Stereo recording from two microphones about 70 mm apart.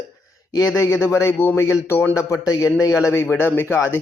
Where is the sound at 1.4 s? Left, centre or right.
Left.